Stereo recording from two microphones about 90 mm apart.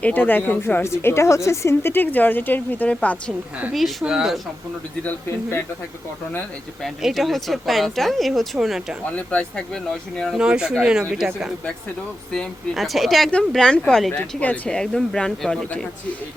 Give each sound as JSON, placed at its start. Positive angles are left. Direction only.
{"t": 0.0, "sound": "a woman's voice", "side_deg": 20}
{"t": 4.0, "sound": "speech", "side_deg": -5}
{"t": 5.0, "sound": "a woman's voice", "side_deg": 25}
{"t": 6.8, "sound": "speech", "side_deg": 0}
{"t": 9.1, "sound": "speech", "side_deg": 10}
{"t": 10.3, "sound": "speech", "side_deg": -10}
{"t": 12.3, "sound": "speech", "side_deg": 5}
{"t": 14.8, "sound": "speech", "side_deg": 5}